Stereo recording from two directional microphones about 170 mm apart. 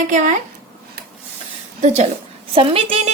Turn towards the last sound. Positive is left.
turn(degrees=-35)  # may be behind; listen again after turning